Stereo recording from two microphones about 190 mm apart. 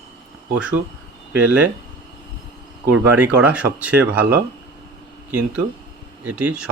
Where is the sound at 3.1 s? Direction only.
10° right (ahead or behind).